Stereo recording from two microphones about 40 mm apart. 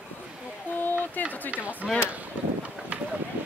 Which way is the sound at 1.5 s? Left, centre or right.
Right.